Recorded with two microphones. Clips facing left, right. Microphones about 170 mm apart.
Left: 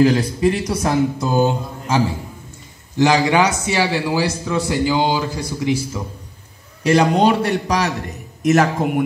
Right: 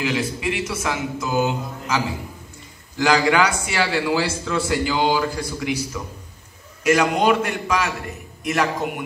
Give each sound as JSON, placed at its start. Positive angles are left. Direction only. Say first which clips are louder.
{"t": 0.0, "sound": "speech", "louder": "left 9 dB", "side_deg": 40}
{"t": 3.0, "sound": "a man's voice", "louder": "left 3 dB", "side_deg": 20}
{"t": 6.8, "sound": "speech", "louder": "left 4 dB", "side_deg": 35}